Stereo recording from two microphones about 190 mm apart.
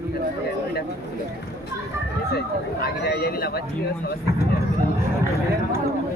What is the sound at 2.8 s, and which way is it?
Speech, 55° left (ahead or behind).